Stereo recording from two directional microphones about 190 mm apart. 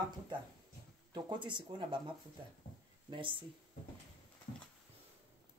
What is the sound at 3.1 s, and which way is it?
Speech, 25° right (ahead or behind).